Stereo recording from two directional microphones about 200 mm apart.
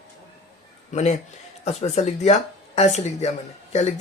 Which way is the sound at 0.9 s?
35° left (ahead or behind).